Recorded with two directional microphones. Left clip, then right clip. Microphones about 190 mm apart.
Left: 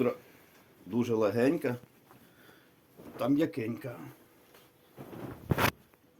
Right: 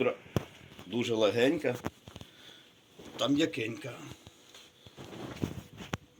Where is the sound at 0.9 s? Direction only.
55° left (ahead or behind).